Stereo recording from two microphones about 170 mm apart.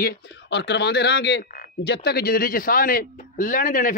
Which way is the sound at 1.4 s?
55° left (ahead or behind).